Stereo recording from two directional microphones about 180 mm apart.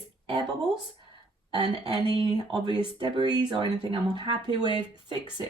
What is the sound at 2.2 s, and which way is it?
Speech, 25° right (ahead or behind).